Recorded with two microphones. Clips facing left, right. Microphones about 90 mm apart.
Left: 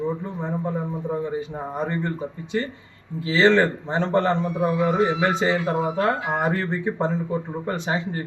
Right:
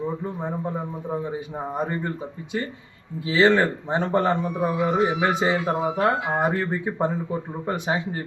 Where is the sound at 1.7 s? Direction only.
15° right (ahead or behind).